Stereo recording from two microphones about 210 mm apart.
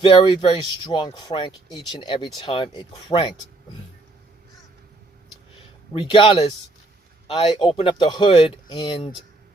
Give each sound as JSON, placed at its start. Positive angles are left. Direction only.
{"t": 0.0, "sound": "speech", "side_deg": 20}
{"t": 5.9, "sound": "speech", "side_deg": 25}